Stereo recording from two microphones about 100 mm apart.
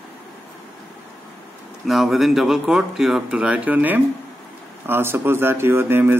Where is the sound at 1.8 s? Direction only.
Centre (ahead or behind).